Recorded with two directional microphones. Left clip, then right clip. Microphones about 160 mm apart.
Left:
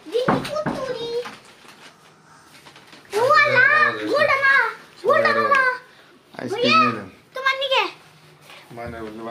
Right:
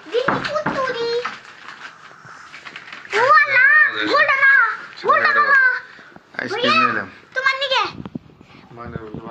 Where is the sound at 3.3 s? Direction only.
30° left (ahead or behind).